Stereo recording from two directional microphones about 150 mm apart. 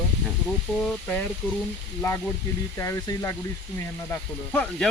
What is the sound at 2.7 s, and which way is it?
Speech, 20° left (ahead or behind).